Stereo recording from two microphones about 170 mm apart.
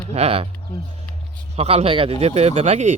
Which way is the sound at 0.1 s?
35° right (ahead or behind).